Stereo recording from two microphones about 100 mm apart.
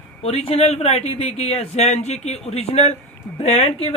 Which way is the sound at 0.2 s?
85° left.